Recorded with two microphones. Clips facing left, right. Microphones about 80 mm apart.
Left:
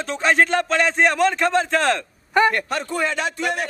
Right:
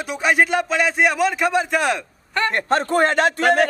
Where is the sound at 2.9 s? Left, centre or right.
Right.